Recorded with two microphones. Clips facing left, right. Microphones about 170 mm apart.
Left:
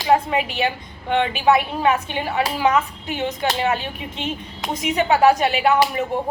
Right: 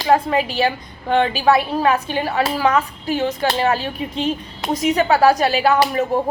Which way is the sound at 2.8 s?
35° right (ahead or behind).